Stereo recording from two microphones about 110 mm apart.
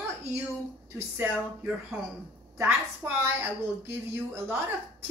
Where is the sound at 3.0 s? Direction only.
20° right (ahead or behind).